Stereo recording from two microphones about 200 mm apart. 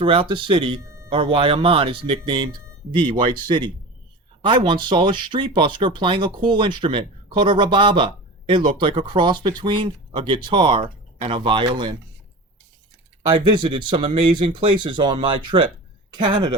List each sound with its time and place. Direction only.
0.0 s speech: 25° right (ahead or behind)
13.3 s speech: 25° right (ahead or behind)